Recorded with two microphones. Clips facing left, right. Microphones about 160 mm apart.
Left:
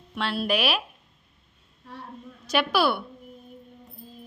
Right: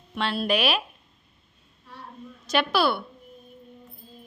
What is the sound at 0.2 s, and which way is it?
Speech, 5° left (ahead or behind).